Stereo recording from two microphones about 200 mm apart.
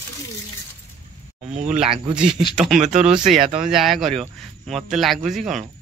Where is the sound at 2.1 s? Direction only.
5° right (ahead or behind).